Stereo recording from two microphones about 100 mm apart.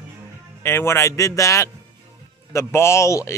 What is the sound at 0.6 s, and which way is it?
A man's voice, 25° left (ahead or behind).